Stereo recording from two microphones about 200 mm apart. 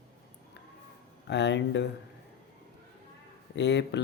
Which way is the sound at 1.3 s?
60° left (ahead or behind).